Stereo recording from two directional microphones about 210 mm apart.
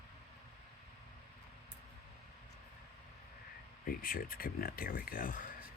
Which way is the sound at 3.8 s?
45° left (ahead or behind).